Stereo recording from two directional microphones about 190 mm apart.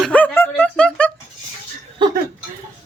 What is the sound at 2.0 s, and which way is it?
Speech, 25° right (ahead or behind).